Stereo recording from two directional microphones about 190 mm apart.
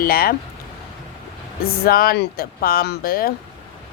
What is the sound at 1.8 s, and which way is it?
A woman's voice, 50° left (ahead or behind).